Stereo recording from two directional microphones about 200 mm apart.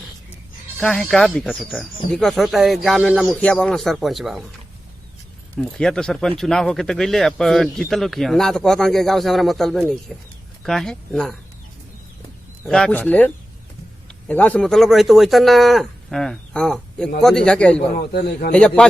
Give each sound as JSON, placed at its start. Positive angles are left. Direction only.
{"t": 0.8, "sound": "speech", "side_deg": 5}
{"t": 5.5, "sound": "speech", "side_deg": 0}
{"t": 12.6, "sound": "speech", "side_deg": 5}
{"t": 18.1, "sound": "a man's voice", "side_deg": 50}
{"t": 18.5, "sound": "speech", "side_deg": 5}